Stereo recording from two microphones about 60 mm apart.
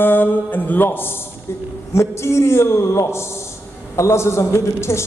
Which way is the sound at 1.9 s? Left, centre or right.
Left.